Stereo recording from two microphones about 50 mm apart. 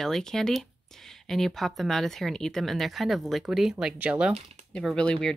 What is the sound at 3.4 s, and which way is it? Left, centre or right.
Speech, centre.